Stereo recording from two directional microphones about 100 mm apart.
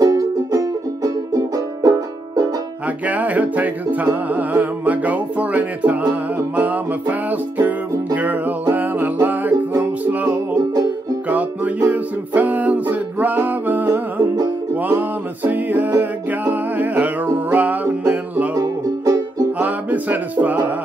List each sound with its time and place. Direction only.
0.0 s music: 35° right (ahead or behind)
3.1 s music: 15° right (ahead or behind)
10.7 s music: 40° right (ahead or behind)
11.2 s music: 15° right (ahead or behind)
18.5 s music: 35° right (ahead or behind)
19.6 s music: 15° right (ahead or behind)